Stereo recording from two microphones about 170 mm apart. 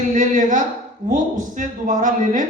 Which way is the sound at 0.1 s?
50° right (ahead or behind).